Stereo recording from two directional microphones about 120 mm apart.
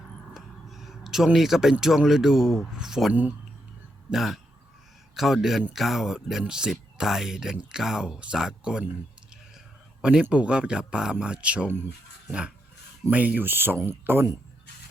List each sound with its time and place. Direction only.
0.3 s speech: centre (ahead or behind)
4.1 s speech: centre (ahead or behind)
10.0 s speech: 10° right (ahead or behind)